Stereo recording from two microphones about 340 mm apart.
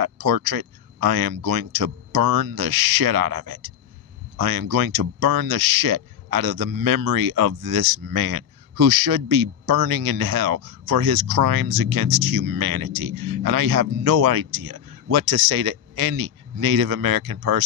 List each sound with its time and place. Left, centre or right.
0.0 s speech: right